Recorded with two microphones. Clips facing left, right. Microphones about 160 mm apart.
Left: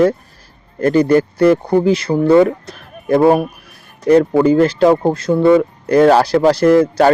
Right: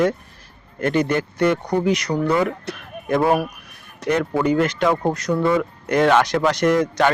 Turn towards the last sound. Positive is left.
turn(degrees=30)  # may be behind; listen again after turning